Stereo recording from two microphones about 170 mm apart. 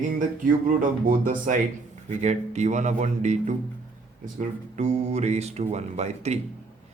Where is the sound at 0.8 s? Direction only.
50° right (ahead or behind).